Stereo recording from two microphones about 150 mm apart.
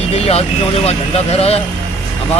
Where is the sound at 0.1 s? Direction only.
45° left (ahead or behind).